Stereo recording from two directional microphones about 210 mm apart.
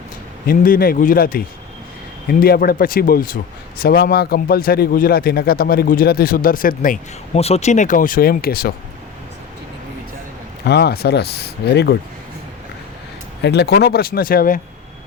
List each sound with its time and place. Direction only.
0.4 s a man's voice: 45° left (ahead or behind)
2.4 s a man's voice: 45° left (ahead or behind)
10.7 s a man's voice: 50° left (ahead or behind)
13.4 s a man's voice: 50° left (ahead or behind)